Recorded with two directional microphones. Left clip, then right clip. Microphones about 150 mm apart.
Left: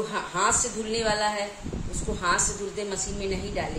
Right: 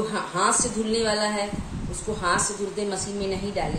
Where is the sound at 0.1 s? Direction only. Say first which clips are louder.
Even; 15° left (ahead or behind).